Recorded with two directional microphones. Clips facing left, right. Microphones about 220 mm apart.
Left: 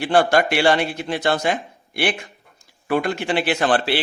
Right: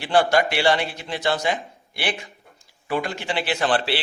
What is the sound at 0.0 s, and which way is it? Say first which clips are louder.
A man's voice: left 2 dB; 50° left (ahead or behind).